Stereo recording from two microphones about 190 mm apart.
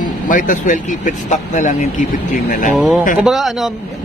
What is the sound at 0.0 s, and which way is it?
Speech, 45° left (ahead or behind).